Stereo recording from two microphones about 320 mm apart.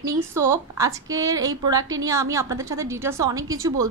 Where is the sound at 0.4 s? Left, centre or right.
Centre.